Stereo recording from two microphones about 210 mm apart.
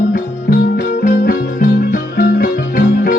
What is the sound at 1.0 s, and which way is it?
Music, 40° left (ahead or behind).